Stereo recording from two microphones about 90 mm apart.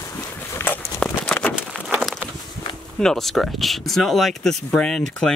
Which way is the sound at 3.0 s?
5° left (ahead or behind).